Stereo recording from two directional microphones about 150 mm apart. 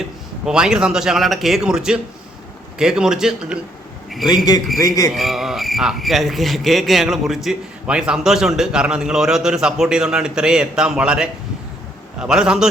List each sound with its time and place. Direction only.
0.4 s a man's voice: 5° right (ahead or behind)
4.8 s a man's voice: 25° left (ahead or behind)
5.1 s a man's voice: centre (ahead or behind)